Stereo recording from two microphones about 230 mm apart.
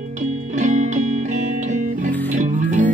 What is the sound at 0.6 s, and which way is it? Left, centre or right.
Music, right.